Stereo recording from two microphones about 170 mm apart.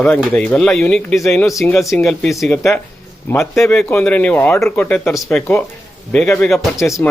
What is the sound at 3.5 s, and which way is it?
Speech, 15° left (ahead or behind).